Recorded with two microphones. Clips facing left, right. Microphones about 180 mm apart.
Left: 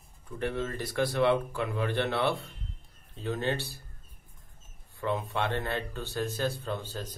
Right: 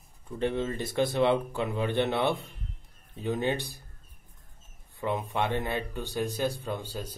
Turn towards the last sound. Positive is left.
turn(degrees=-10)  # may be behind; listen again after turning